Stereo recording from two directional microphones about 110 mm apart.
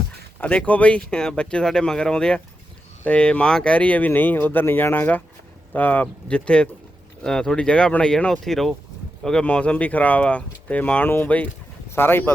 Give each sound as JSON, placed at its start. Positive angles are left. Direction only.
{"t": 0.3, "sound": "speech", "side_deg": 15}